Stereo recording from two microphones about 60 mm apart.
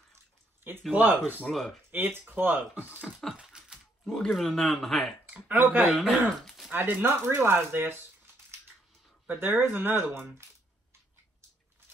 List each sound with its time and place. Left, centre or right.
0.9 s speech: right
1.5 s speech: centre
1.9 s speech: right
3.3 s typewriter: centre
4.0 s speech: centre
5.3 s speech: right
5.9 s speech: centre
6.7 s speech: right
9.4 s speech: right